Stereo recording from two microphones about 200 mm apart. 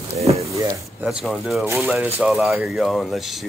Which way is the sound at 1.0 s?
Centre (ahead or behind).